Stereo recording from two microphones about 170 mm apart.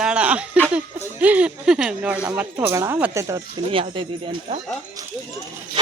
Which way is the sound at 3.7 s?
30° right (ahead or behind).